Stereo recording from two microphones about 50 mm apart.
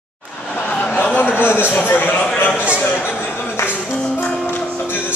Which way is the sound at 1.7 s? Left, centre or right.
Left.